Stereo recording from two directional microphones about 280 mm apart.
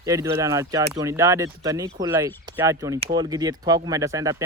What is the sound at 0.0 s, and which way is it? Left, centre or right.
A man's voice, centre.